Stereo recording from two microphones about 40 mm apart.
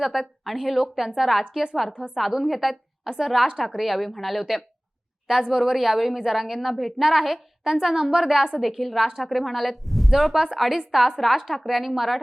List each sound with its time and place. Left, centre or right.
0.0 s a woman's voice: centre
1.9 s a woman's voice: right
2.1 s a woman's voice: centre
5.3 s a woman's voice: centre
9.4 s a woman's voice: centre